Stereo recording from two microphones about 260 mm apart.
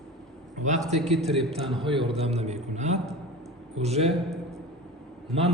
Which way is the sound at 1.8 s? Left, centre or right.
Centre.